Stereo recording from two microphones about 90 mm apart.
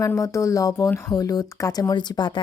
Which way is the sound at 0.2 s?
35° left (ahead or behind).